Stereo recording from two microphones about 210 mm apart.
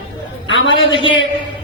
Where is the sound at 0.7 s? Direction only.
25° left (ahead or behind).